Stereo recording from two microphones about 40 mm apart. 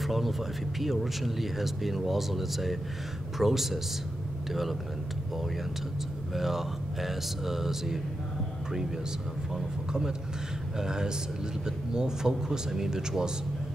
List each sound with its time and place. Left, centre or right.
0.0 s speech: centre
6.3 s speech: centre
9.5 s speech: centre